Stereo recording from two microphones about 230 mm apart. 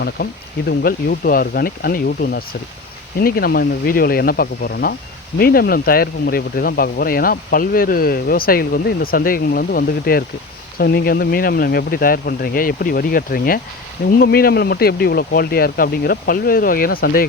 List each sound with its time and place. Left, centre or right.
0.8 s speech: left